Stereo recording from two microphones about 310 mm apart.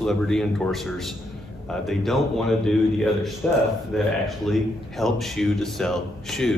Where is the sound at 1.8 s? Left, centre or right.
Centre.